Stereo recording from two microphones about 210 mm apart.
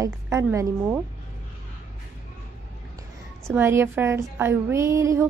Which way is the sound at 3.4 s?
10° right (ahead or behind).